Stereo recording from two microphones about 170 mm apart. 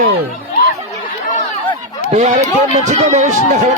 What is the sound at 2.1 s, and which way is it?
Speech, 40° right (ahead or behind).